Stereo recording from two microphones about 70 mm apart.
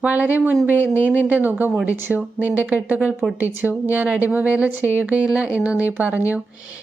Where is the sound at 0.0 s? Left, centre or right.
Right.